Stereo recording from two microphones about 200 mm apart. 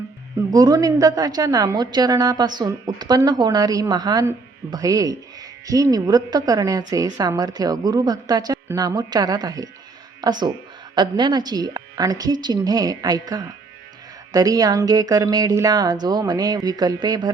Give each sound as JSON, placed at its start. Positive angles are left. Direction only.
{"t": 0.3, "sound": "speech", "side_deg": -20}